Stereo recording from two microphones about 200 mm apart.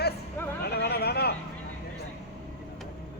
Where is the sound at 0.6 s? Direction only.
55° left (ahead or behind).